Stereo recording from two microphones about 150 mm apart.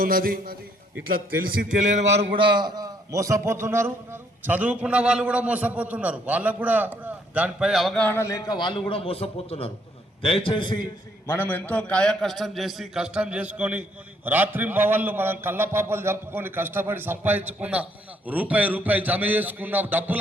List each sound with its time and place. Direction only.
0.0 s a man's voice: 75° right (ahead or behind); by 2.1 s 55° right (ahead or behind)
2.4 s a man's voice: 30° right (ahead or behind); by 8.0 s centre (ahead or behind)
8.0 s a man's voice: 15° left (ahead or behind); by 10.8 s 30° left (ahead or behind)
11.3 s a man's voice: 15° left (ahead or behind); by 20.1 s 10° right (ahead or behind)